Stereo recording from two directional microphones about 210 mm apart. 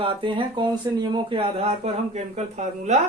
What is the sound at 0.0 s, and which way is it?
Speech, 25° right (ahead or behind).